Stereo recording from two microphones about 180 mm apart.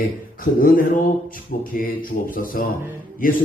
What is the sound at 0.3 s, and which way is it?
Speech, 50° left (ahead or behind).